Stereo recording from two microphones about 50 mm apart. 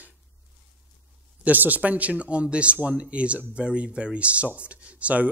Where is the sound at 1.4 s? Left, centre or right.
Right.